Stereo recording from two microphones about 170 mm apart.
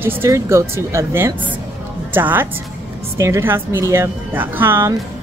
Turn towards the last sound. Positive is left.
turn(degrees=-15)  # may be behind; listen again after turning